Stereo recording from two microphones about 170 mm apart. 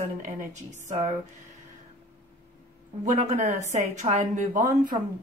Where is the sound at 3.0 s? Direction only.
45° right (ahead or behind).